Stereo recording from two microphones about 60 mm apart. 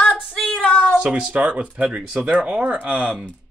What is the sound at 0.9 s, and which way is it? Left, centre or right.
Speech, centre.